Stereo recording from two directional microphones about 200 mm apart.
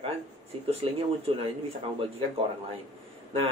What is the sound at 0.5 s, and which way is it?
Speech, 25° right (ahead or behind).